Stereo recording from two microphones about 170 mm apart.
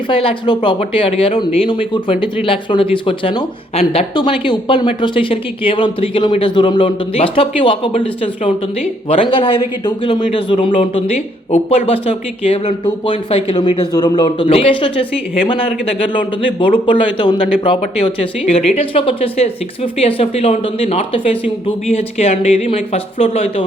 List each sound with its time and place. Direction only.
0.1 s speech: 30° left (ahead or behind)